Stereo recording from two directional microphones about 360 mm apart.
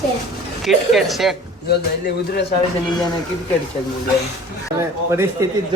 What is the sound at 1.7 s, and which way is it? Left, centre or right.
Speech, left.